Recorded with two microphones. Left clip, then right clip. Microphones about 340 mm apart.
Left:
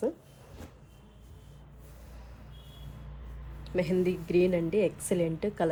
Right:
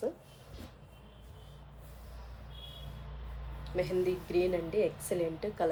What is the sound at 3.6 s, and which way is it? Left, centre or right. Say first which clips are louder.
A woman's voice: left 3 dB; left.